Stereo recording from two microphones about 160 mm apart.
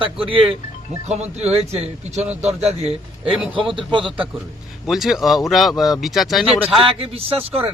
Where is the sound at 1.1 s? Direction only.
45° right (ahead or behind).